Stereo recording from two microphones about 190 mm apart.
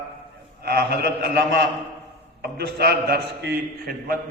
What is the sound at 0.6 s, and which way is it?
Speech, 60° right (ahead or behind).